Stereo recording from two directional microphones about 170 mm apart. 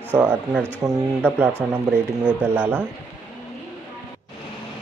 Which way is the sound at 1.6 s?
5° right (ahead or behind).